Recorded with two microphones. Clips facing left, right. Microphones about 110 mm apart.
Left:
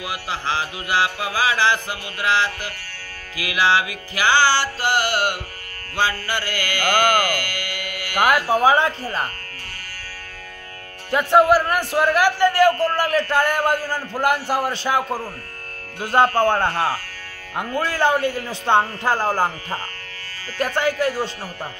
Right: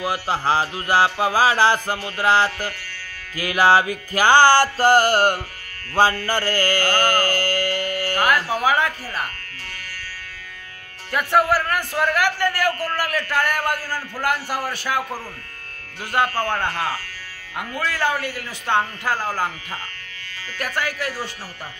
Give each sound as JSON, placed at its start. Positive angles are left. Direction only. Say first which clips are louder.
{"t": 0.0, "sound": "music", "louder": "right 5 dB", "side_deg": -40}
{"t": 7.0, "sound": "mantra", "louder": "left 1 dB", "side_deg": -35}
{"t": 8.5, "sound": "a man's voice", "louder": "left 4 dB", "side_deg": 25}
{"t": 11.1, "sound": "a man's voice", "louder": "left 4 dB", "side_deg": 20}